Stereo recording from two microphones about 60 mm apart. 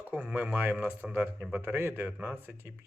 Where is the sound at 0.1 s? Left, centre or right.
Right.